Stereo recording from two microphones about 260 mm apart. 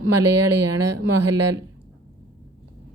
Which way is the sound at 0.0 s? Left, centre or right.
Right.